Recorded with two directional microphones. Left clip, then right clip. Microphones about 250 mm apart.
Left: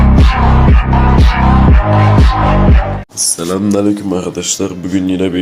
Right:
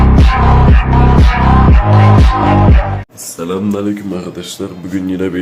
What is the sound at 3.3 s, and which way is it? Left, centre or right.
Speech, centre.